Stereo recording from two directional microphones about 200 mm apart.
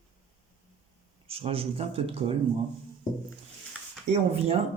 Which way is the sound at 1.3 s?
30° right (ahead or behind).